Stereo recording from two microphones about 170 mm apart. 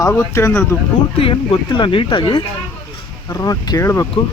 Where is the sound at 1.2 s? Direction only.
30° left (ahead or behind).